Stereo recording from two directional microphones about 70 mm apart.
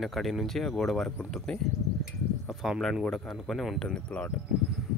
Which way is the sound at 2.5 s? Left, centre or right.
Centre.